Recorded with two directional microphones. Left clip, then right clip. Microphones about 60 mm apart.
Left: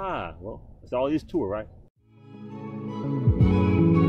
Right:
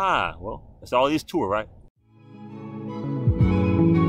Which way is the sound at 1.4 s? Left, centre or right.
Right.